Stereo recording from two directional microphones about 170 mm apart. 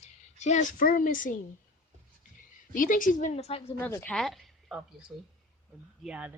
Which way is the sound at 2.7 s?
50° left (ahead or behind).